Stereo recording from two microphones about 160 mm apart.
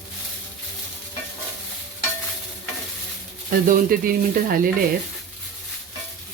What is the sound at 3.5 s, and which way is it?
Speech, 60° right (ahead or behind).